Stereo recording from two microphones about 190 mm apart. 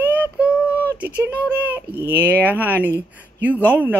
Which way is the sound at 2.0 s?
10° left (ahead or behind).